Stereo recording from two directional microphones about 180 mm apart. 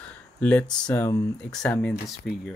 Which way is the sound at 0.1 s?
5° left (ahead or behind).